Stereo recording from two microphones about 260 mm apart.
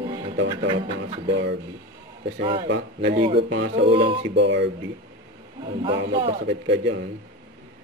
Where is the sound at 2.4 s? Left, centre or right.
Right.